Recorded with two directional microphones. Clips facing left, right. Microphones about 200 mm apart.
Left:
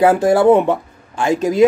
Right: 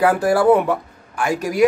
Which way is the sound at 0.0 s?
25° left (ahead or behind).